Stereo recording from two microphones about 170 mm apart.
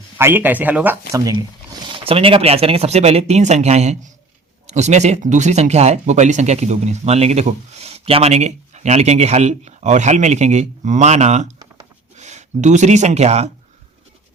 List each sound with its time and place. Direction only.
0.2 s speech: 15° right (ahead or behind)
1.1 s speech: 20° right (ahead or behind); by 13.5 s 40° right (ahead or behind)